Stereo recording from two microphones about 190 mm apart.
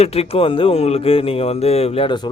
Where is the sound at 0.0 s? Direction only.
30° left (ahead or behind).